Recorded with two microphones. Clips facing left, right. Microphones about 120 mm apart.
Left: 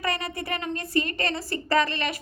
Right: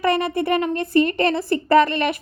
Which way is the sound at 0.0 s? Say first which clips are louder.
Right 10 dB; 55° right (ahead or behind).